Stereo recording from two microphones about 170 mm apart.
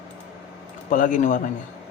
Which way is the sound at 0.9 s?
50° left (ahead or behind).